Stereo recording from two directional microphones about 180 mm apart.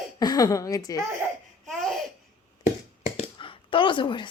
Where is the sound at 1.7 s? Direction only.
Centre (ahead or behind).